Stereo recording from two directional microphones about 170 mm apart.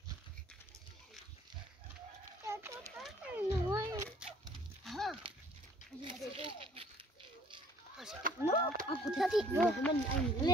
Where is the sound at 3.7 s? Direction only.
15° right (ahead or behind).